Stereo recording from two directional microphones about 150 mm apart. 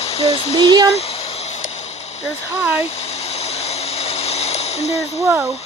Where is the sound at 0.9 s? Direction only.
40° left (ahead or behind).